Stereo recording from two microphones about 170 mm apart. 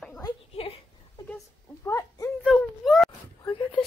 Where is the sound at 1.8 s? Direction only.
20° left (ahead or behind).